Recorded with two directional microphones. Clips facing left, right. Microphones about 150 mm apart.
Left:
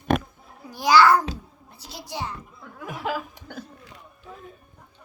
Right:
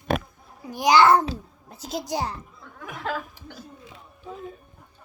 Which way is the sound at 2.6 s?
5° left (ahead or behind).